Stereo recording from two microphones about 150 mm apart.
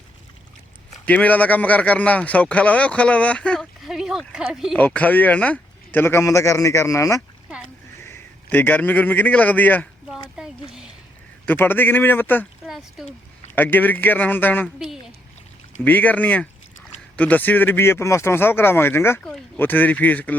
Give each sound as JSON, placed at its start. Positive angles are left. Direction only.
{"t": 1.0, "sound": "a man's voice", "side_deg": 10}
{"t": 4.8, "sound": "a man's voice", "side_deg": 10}
{"t": 10.1, "sound": "a sound", "side_deg": -5}
{"t": 11.4, "sound": "a man's voice", "side_deg": 15}
{"t": 12.6, "sound": "speech", "side_deg": 0}
{"t": 13.6, "sound": "a man's voice", "side_deg": 10}
{"t": 14.8, "sound": "speech", "side_deg": -5}
{"t": 15.8, "sound": "a man's voice", "side_deg": 10}